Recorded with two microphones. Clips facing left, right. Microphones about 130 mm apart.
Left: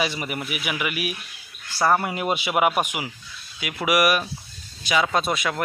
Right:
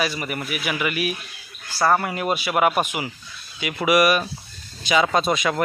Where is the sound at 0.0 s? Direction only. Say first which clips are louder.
Right 1 dB; 20° left (ahead or behind).